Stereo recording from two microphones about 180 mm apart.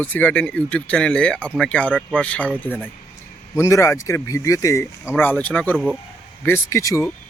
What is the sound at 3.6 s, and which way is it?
Speech, 15° left (ahead or behind).